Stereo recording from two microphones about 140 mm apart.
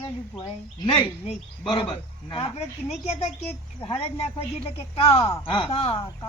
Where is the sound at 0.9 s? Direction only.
40° left (ahead or behind).